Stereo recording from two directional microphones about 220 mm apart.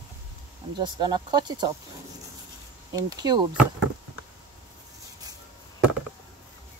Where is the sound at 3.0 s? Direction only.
15° right (ahead or behind).